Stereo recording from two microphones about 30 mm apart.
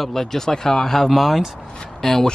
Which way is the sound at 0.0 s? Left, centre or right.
Centre.